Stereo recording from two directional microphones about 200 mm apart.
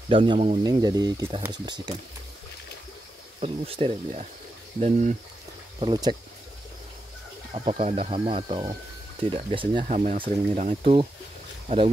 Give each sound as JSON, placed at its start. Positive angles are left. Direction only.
{"t": 0.1, "sound": "speech", "side_deg": -25}
{"t": 3.3, "sound": "speech", "side_deg": -30}
{"t": 5.8, "sound": "speech", "side_deg": -25}
{"t": 7.5, "sound": "speech", "side_deg": -30}